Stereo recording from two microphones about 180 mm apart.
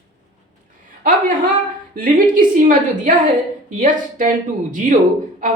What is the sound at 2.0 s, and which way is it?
A woman's voice, 50° right (ahead or behind).